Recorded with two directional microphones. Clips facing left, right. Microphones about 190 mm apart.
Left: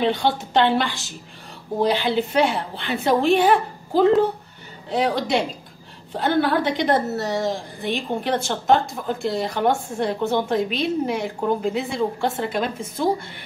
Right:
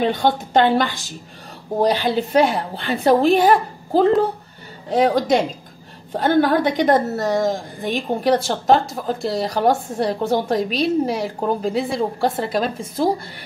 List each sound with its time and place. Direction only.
0.0 s a woman's voice: 45° right (ahead or behind)